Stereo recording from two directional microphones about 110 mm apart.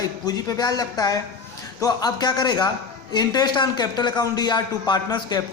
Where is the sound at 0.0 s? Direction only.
35° left (ahead or behind).